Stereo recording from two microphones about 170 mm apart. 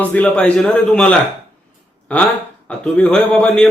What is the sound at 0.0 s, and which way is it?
A man's voice, 10° left (ahead or behind).